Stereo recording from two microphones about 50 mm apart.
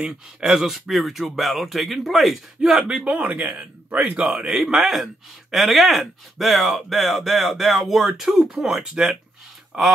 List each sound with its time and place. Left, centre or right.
0.0 s speech: centre
2.9 s speech: right
4.3 s a man's voice: centre
4.7 s a man's voice: centre